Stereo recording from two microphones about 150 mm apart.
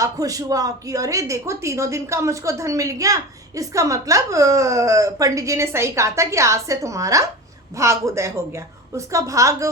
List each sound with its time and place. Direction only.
0.0 s speech: 20° right (ahead or behind)